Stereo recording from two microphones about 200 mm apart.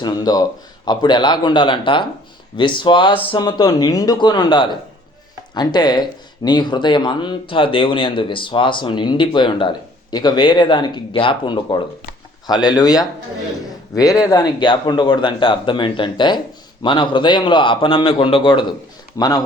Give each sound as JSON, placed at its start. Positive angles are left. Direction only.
{"t": 0.0, "sound": "speech", "side_deg": 20}